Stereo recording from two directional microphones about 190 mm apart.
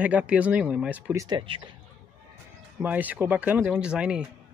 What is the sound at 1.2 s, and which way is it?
Speech, 25° right (ahead or behind).